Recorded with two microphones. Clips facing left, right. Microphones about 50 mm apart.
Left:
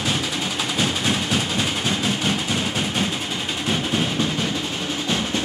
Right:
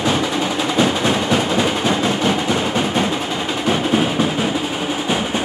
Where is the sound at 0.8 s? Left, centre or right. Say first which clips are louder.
Right 6 dB; centre.